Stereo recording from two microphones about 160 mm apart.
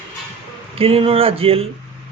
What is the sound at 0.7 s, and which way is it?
Speech, 35° right (ahead or behind).